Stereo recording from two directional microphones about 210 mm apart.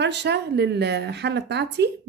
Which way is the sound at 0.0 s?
55° right (ahead or behind).